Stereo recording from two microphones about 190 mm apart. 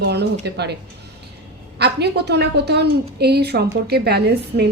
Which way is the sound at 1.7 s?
60° right (ahead or behind).